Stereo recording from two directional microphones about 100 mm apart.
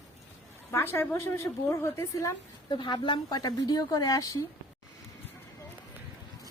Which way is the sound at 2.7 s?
50° left (ahead or behind).